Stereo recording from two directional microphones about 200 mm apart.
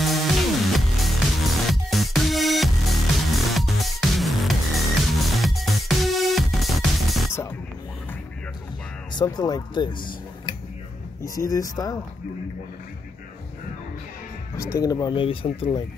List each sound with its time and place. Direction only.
0.0 s music: centre (ahead or behind)
9.1 s speech: 20° left (ahead or behind)
11.2 s speech: 15° left (ahead or behind)
14.8 s speech: 20° left (ahead or behind)